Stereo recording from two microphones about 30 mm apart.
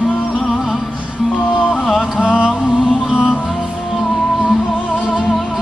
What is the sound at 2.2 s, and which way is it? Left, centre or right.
Mantra, right.